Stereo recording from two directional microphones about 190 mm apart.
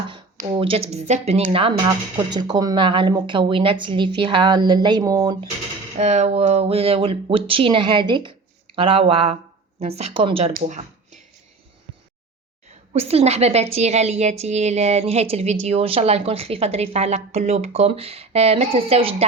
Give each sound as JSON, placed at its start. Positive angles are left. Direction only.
{"t": 0.3, "sound": "speech", "side_deg": -30}
{"t": 6.0, "sound": "a woman's voice", "side_deg": -35}
{"t": 10.5, "sound": "speech", "side_deg": -40}
{"t": 12.9, "sound": "a woman's voice", "side_deg": -35}